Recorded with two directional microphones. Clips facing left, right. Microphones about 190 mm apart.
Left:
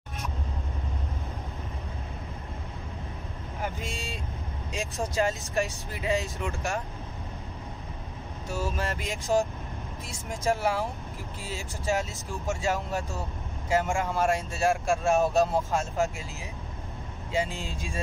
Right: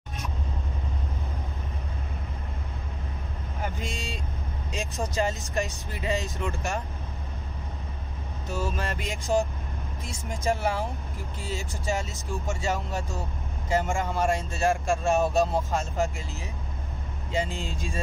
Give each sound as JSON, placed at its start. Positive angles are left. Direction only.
{"t": 3.6, "sound": "speech", "side_deg": 5}
{"t": 8.7, "sound": "speech", "side_deg": 0}